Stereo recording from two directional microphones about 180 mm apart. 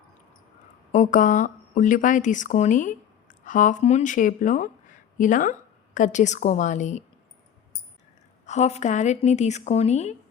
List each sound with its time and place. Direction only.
0.9 s a woman's voice: 45° left (ahead or behind)
8.4 s a woman's voice: 40° left (ahead or behind)